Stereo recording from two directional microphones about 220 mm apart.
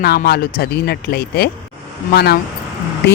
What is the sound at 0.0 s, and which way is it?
Speech, 45° left (ahead or behind).